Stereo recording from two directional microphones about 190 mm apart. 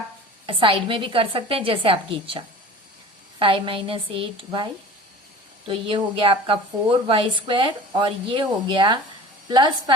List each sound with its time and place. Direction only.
0.4 s a woman's voice: 30° right (ahead or behind)